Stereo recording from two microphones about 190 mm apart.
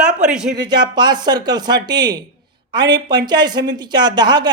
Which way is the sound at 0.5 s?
20° right (ahead or behind).